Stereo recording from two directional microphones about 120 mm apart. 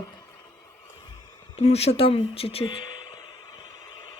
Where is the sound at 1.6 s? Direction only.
60° left (ahead or behind).